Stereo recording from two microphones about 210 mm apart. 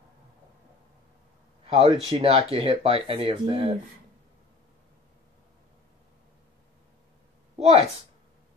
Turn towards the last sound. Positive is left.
turn(degrees=-30)  # may be behind; listen again after turning